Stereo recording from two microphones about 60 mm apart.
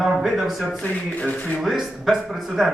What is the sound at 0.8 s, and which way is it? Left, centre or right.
Speech, left.